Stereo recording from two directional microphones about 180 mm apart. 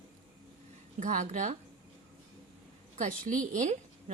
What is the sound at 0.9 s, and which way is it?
Speech, 45° right (ahead or behind).